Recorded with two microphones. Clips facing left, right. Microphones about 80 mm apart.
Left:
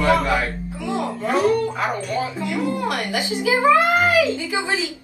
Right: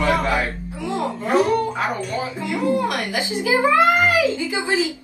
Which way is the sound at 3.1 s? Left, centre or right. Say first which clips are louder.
Left 1 dB; right.